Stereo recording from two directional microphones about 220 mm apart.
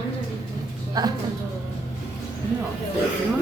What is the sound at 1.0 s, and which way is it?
Speech, 15° right (ahead or behind).